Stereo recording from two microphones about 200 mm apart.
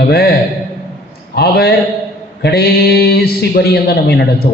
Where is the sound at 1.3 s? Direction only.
50° left (ahead or behind).